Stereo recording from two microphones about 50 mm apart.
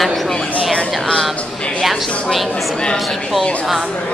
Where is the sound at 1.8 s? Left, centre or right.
Centre.